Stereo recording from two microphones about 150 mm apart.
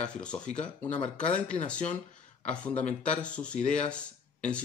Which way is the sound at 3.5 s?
50° left (ahead or behind).